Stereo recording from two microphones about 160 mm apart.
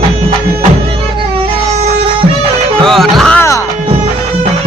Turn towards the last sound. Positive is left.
turn(degrees=20)  # may be behind; listen again after turning